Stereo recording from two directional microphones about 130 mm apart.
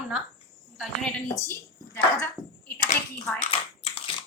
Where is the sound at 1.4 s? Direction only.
20° left (ahead or behind).